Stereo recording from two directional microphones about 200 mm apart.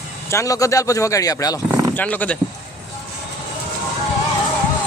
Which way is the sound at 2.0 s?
5° left (ahead or behind).